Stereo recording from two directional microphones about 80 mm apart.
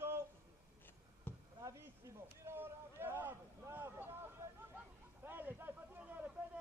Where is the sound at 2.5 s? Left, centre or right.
Right.